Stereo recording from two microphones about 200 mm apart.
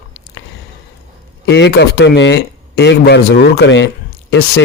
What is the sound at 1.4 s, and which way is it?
A man's voice, 60° left (ahead or behind).